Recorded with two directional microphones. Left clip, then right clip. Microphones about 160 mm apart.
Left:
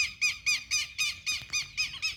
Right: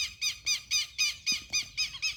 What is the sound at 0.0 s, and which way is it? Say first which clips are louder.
Squeal: left 4 dB; 10° right (ahead or behind).